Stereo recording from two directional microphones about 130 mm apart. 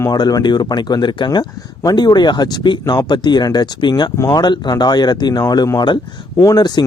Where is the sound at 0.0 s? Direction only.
30° left (ahead or behind).